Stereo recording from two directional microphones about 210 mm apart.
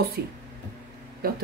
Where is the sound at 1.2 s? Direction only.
45° right (ahead or behind).